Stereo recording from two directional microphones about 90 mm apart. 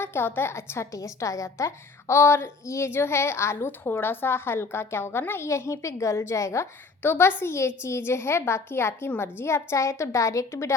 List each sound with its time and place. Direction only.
0.0 s a woman's voice: 25° left (ahead or behind)
7.0 s a woman's voice: 25° left (ahead or behind)